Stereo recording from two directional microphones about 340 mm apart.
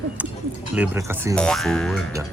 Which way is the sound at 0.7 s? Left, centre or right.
Centre.